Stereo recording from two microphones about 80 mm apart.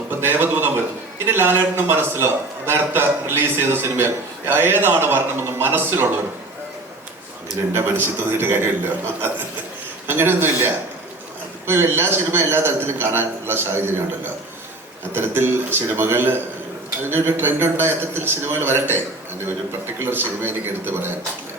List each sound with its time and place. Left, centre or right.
0.1 s a sound: right
1.3 s a man's voice: right
7.7 s a man's voice: right
15.1 s a man's voice: right